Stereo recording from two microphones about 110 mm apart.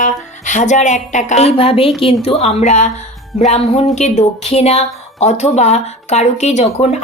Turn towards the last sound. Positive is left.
turn(degrees=75)  # may be behind; listen again after turning